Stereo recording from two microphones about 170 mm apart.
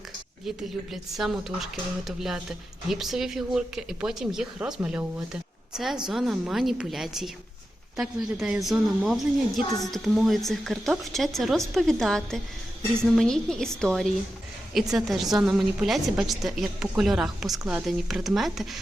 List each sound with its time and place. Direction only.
0.4 s a woman's voice: centre (ahead or behind)